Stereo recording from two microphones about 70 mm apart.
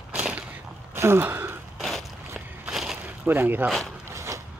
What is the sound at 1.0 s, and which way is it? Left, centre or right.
Gasp, right.